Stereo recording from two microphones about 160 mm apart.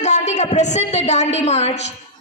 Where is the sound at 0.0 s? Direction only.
45° left (ahead or behind).